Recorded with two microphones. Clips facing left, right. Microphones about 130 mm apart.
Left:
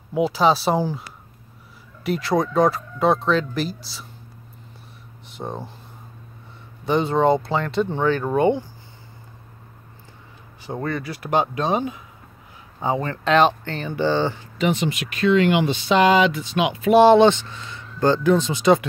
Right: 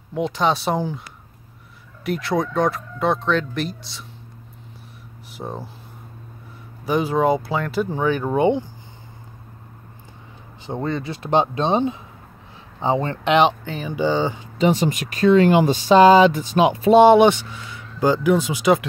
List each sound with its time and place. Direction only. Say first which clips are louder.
0.1 s speech: left 3 dB; 5° left (ahead or behind)
2.0 s speech: left 1 dB; centre (ahead or behind)
5.3 s speech: even; 5° right (ahead or behind)
6.8 s speech: even; 5° right (ahead or behind)
10.7 s speech: right 2 dB; 20° right (ahead or behind)
14.6 s speech: right 3 dB; 40° right (ahead or behind)
16.9 s speech: even; 15° right (ahead or behind)